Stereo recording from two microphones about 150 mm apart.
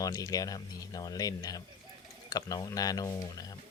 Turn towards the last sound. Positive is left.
turn(degrees=25)  # may be behind; listen again after turning